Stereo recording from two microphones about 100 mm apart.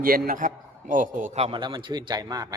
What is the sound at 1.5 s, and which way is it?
Speech, 50° right (ahead or behind).